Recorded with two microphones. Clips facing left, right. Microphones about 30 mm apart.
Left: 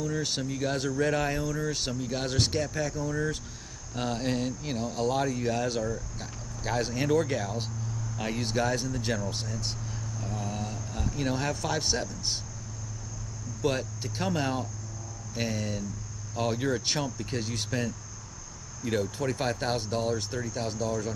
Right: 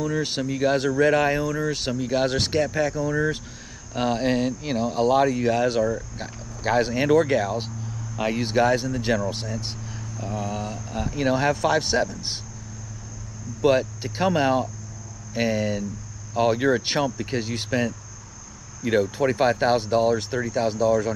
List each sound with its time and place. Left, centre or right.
0.0 s speech: right
13.6 s speech: right